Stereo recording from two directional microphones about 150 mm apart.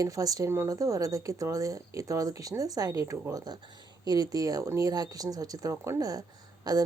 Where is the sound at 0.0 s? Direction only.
25° right (ahead or behind).